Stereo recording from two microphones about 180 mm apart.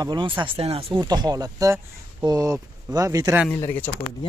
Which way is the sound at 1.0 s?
20° right (ahead or behind).